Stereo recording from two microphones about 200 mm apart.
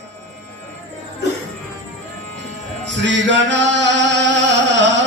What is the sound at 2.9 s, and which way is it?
Music, 65° right (ahead or behind).